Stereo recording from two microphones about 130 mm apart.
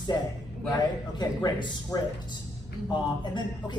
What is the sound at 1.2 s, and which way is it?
A woman's voice, 30° left (ahead or behind).